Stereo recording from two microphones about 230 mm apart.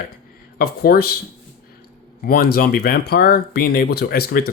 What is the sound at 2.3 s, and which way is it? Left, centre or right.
Speech, left.